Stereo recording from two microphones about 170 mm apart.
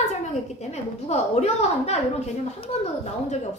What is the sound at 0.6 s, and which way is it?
A woman's voice, 40° left (ahead or behind).